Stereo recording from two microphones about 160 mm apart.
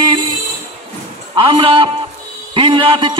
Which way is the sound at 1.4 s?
35° right (ahead or behind).